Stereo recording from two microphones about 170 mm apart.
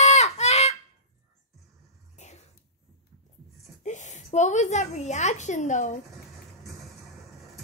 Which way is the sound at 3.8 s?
45° left (ahead or behind).